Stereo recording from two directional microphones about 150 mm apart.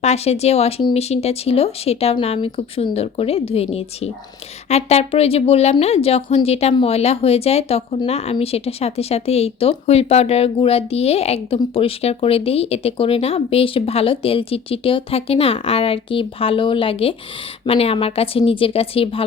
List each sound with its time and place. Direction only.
0.0 s a woman's voice: 45° left (ahead or behind)